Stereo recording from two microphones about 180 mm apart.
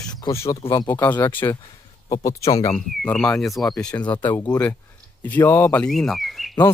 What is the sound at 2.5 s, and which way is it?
Speech, 20° left (ahead or behind).